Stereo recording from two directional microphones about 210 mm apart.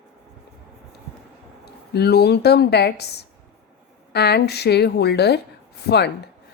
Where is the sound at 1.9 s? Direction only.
50° left (ahead or behind).